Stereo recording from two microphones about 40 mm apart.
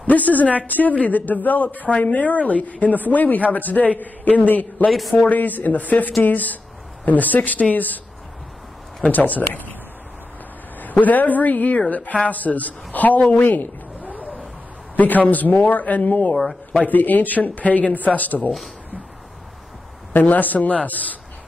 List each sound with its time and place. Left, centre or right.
0.0 s speech: left
9.1 s speech: left
10.8 s speech: left
15.0 s speech: left
16.3 s speech: centre
16.8 s speech: left
20.1 s speech: left